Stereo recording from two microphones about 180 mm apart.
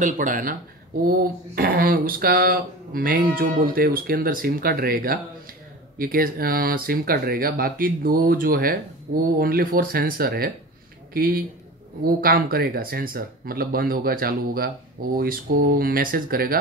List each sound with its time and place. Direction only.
0.0 s speech: 45° right (ahead or behind)